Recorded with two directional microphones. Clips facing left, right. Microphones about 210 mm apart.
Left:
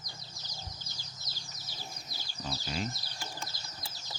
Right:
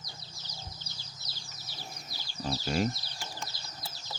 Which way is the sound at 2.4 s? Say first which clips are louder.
Right 7 dB; 50° right (ahead or behind).